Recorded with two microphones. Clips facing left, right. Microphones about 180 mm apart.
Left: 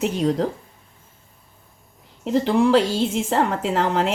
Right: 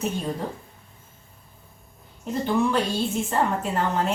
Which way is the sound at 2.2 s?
90° left.